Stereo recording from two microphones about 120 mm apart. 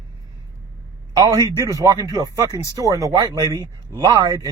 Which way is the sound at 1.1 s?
30° right (ahead or behind).